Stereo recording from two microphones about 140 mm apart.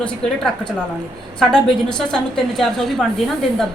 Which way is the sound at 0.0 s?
5° left (ahead or behind).